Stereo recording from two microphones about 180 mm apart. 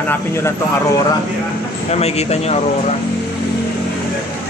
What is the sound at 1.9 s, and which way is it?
Speech, 35° left (ahead or behind).